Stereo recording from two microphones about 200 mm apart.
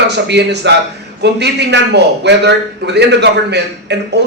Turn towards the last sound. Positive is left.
turn(degrees=-55)  # may be behind; listen again after turning